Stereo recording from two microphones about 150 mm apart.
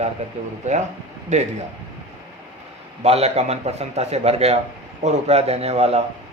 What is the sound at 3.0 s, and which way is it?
A man's voice, 45° right (ahead or behind).